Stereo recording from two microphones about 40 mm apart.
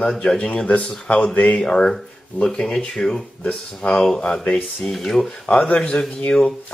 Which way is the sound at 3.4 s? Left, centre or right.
Left.